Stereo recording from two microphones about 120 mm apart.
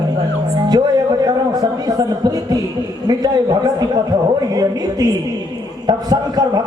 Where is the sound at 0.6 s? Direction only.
35° right (ahead or behind).